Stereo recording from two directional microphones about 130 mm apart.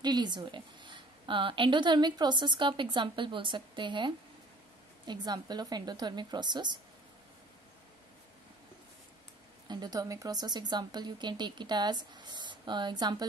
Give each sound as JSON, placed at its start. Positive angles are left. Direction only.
{"t": 0.0, "sound": "a woman's voice", "side_deg": -35}
{"t": 9.7, "sound": "a woman's voice", "side_deg": -30}